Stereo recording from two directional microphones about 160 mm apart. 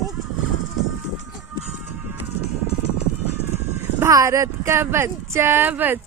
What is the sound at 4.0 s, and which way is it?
Speech, 20° right (ahead or behind).